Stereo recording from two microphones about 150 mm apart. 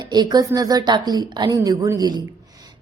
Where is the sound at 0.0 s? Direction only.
30° right (ahead or behind).